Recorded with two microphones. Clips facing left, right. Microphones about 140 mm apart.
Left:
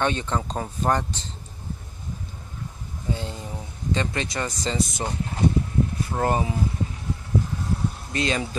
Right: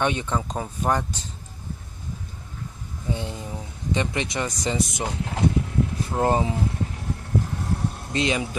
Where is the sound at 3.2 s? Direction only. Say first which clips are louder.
Right 1 dB; 20° right (ahead or behind).